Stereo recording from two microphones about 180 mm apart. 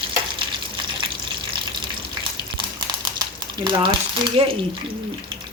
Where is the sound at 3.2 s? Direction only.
25° right (ahead or behind).